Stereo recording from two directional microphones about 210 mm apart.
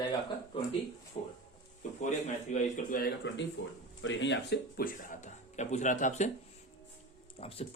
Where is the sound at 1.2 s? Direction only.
35° left (ahead or behind).